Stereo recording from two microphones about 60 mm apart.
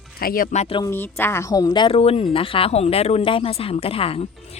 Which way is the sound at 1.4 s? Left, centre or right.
Left.